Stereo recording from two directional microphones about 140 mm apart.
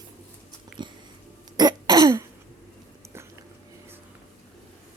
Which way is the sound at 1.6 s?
30° right (ahead or behind).